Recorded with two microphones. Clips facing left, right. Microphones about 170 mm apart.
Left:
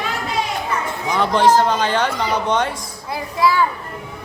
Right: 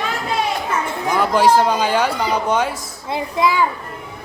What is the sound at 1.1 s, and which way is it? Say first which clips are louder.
Speech: even; 5° right (ahead or behind).